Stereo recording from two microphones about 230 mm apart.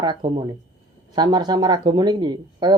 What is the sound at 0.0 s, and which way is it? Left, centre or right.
Speech, centre.